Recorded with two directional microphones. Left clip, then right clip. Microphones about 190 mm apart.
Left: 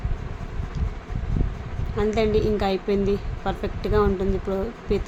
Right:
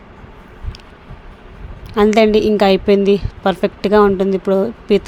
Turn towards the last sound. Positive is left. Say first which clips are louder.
# right 11 dB
turn(degrees=-45)  # may be behind; listen again after turning